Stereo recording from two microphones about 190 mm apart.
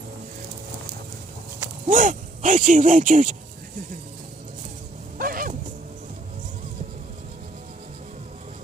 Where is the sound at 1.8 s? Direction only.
45° right (ahead or behind).